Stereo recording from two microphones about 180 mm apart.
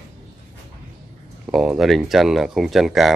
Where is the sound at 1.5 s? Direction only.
Centre (ahead or behind).